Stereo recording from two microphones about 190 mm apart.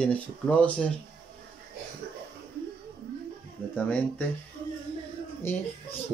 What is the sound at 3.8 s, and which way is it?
Speech, 10° left (ahead or behind).